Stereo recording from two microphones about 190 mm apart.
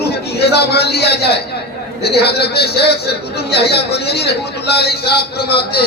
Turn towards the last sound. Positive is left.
turn(degrees=55)  # may be behind; listen again after turning